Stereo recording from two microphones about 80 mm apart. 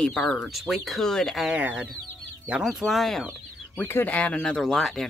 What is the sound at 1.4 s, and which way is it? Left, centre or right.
Speech, centre.